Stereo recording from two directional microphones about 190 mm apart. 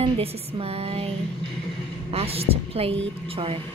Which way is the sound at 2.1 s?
30° right (ahead or behind).